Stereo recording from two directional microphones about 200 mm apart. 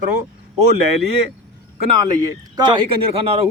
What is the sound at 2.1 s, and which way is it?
Speech, 20° right (ahead or behind).